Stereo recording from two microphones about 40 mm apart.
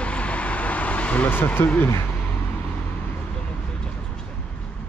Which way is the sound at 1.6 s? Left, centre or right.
Left.